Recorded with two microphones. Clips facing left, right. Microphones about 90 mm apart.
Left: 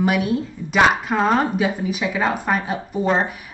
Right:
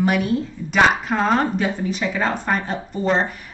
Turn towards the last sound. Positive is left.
turn(degrees=5)  # may be behind; listen again after turning